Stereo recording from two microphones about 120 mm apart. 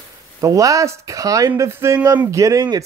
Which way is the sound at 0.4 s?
30° right (ahead or behind).